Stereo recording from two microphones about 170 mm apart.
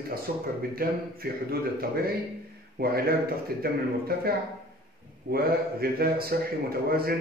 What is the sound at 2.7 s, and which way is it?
A man's voice, 60° right (ahead or behind).